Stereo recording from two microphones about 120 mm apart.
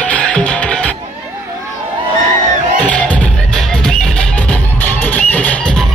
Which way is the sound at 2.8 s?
10° left (ahead or behind).